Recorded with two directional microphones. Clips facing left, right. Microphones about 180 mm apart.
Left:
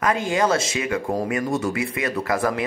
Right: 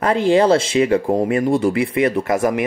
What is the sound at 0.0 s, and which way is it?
A man's voice, 30° right (ahead or behind).